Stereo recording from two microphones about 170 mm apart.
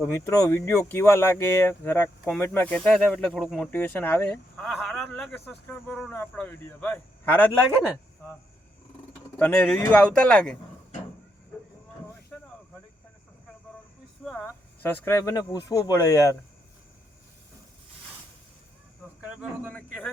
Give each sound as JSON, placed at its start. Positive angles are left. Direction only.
{"t": 0.1, "sound": "speech", "side_deg": 20}
{"t": 3.7, "sound": "speech", "side_deg": 10}
{"t": 9.4, "sound": "speech", "side_deg": 10}
{"t": 12.3, "sound": "cricket", "side_deg": 10}
{"t": 14.4, "sound": "speech", "side_deg": 10}